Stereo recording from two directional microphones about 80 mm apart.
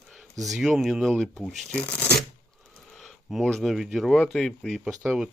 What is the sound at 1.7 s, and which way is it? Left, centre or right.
Speech, centre.